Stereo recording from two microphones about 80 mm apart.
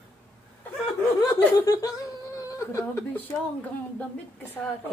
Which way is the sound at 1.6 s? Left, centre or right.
Left.